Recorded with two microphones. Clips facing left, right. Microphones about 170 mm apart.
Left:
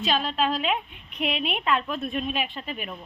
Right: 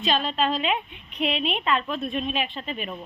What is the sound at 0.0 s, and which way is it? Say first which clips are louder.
Speech: right 1 dB; 5° left (ahead or behind).